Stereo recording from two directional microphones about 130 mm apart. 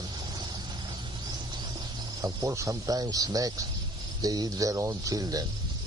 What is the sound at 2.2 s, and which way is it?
Speech, 25° right (ahead or behind).